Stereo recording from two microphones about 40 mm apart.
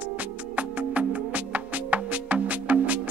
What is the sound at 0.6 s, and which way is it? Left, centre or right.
Music, right.